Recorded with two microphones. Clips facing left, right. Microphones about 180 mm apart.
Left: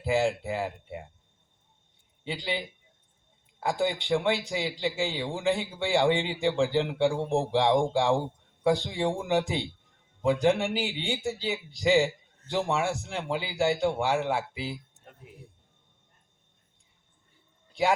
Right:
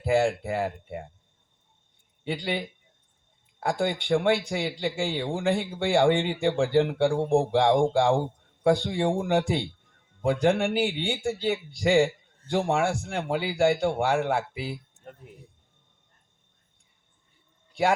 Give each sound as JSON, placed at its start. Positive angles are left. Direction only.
{"t": 0.0, "sound": "speech", "side_deg": -50}
{"t": 2.2, "sound": "speech", "side_deg": -50}